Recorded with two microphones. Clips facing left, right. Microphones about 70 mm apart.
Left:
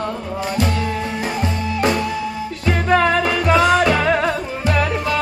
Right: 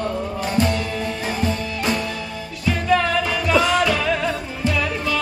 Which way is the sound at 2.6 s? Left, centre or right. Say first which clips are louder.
Left 3 dB; left.